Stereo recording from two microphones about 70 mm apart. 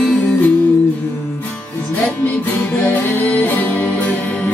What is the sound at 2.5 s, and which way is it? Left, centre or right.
Music, left.